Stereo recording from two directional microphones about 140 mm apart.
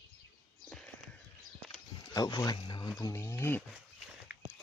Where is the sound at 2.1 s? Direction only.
25° left (ahead or behind).